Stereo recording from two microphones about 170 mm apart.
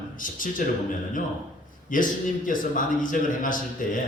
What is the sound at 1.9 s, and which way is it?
Speech, 50° left (ahead or behind).